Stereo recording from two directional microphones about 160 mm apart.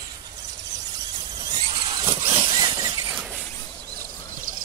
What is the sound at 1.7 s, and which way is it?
Vehicle, 35° right (ahead or behind).